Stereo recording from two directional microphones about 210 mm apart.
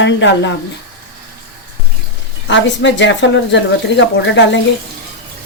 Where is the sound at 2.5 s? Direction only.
60° left (ahead or behind).